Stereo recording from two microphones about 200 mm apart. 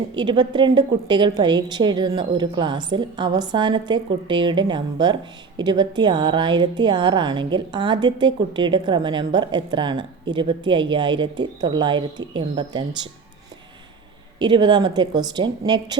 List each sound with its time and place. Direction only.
0.1 s a woman's voice: 20° right (ahead or behind)
14.3 s a woman's voice: 20° right (ahead or behind)